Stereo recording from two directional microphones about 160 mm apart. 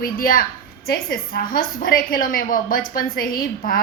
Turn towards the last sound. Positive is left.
turn(degrees=65)  # may be behind; listen again after turning